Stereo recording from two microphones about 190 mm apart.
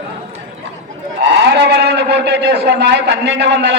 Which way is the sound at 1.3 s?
65° right (ahead or behind).